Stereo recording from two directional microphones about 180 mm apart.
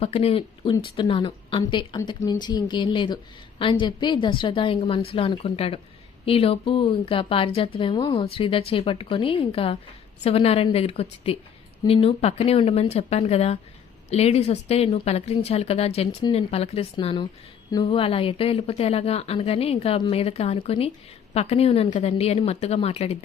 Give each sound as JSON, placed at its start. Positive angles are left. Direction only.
{"t": 0.0, "sound": "a woman's voice", "side_deg": 35}